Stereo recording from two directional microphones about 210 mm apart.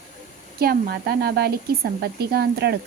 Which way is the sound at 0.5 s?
45° right (ahead or behind).